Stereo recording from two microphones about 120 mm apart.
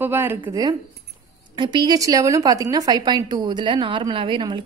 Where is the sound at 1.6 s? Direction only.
40° right (ahead or behind).